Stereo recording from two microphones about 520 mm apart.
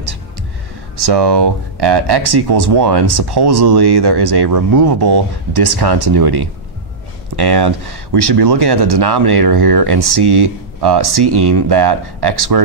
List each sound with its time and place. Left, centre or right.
0.9 s speech: right